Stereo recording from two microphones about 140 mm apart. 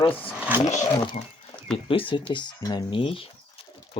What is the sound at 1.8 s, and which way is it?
Speech, 40° left (ahead or behind).